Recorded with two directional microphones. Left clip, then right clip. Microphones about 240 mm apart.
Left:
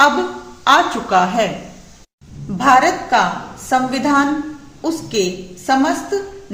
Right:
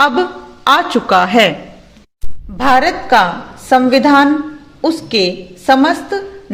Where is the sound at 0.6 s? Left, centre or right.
Right.